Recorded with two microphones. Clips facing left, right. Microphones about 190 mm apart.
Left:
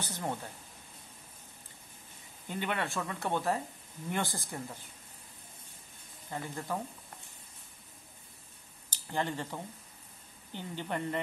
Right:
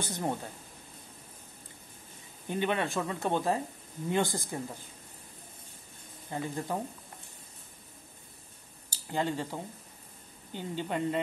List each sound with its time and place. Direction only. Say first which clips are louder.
0.0 s speech: right 4 dB; 15° right (ahead or behind)
2.4 s speech: right 5 dB; 20° right (ahead or behind)
6.3 s speech: right 3 dB; 20° right (ahead or behind)
9.1 s speech: right 3 dB; 15° right (ahead or behind)